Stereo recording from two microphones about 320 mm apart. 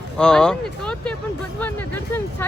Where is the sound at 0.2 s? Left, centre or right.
Centre.